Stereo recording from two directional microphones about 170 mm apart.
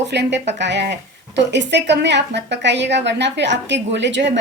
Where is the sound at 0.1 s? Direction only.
90° right.